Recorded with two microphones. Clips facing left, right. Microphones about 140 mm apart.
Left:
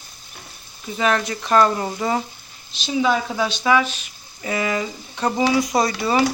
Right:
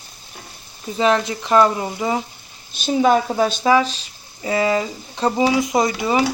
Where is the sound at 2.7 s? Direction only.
45° right (ahead or behind).